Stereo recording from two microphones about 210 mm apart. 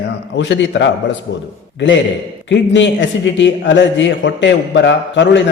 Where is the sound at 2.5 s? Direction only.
60° left (ahead or behind).